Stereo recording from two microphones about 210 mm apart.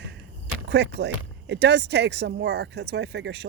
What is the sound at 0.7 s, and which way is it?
Speech, 55° right (ahead or behind).